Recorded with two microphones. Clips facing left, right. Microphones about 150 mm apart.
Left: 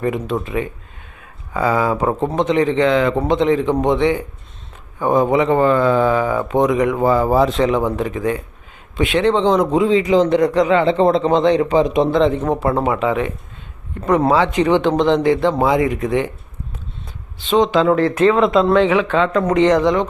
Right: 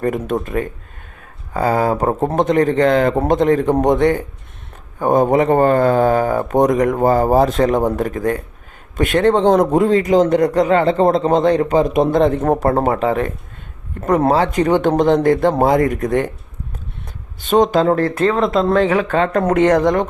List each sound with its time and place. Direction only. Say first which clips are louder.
0.0 s speech: right 1 dB; 45° right (ahead or behind)
17.4 s speech: right 1 dB; 45° right (ahead or behind)